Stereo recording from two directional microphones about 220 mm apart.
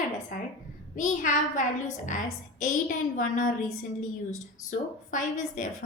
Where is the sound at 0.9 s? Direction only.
35° left (ahead or behind).